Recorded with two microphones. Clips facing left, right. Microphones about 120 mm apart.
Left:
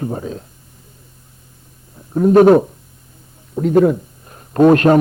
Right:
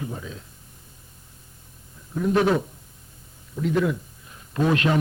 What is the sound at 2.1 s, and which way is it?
A man's voice, 45° left (ahead or behind).